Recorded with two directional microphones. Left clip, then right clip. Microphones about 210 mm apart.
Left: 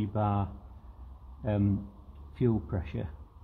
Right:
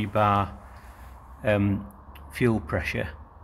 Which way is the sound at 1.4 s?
5° left (ahead or behind).